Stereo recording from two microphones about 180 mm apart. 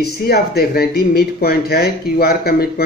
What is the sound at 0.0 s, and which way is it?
A man's voice, 60° left (ahead or behind).